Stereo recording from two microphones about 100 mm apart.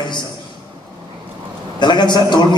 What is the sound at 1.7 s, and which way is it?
Speech, 50° left (ahead or behind).